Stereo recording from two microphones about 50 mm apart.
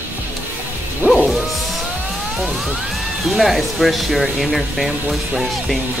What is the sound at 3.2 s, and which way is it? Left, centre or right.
Speech, centre.